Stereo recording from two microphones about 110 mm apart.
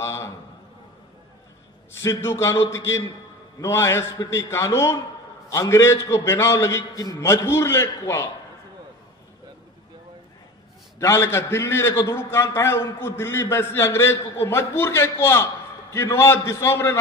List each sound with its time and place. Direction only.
0.0 s a sound: 25° left (ahead or behind)
2.0 s a man's voice: 25° left (ahead or behind)
11.0 s a man's voice: 25° left (ahead or behind)